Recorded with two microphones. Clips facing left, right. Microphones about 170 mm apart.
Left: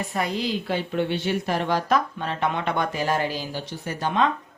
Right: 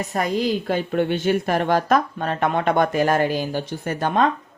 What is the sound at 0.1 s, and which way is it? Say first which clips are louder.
A woman's voice: right 6 dB; 45° right (ahead or behind).